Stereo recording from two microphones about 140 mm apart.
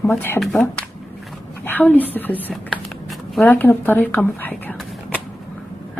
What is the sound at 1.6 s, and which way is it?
A woman's voice, 10° left (ahead or behind).